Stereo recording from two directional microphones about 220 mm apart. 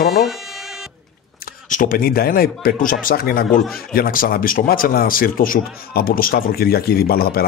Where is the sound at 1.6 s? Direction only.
35° left (ahead or behind).